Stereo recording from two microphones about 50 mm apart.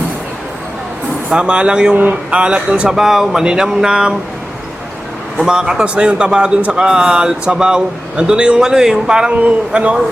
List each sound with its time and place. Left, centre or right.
1.3 s a man's voice: centre
2.0 s speech: right
2.4 s a man's voice: right
2.9 s speech: centre
5.5 s a man's voice: centre
9.3 s a man's voice: right